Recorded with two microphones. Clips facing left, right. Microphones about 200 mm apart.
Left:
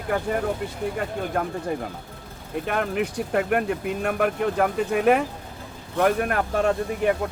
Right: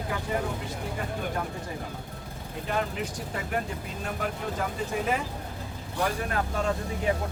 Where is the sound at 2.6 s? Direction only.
65° left (ahead or behind).